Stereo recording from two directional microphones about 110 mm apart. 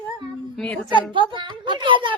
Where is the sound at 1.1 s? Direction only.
50° right (ahead or behind).